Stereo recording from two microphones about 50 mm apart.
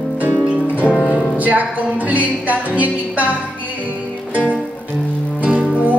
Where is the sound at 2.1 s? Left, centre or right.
Right.